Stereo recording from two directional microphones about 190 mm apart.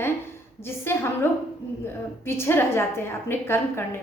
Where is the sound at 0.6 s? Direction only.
10° left (ahead or behind).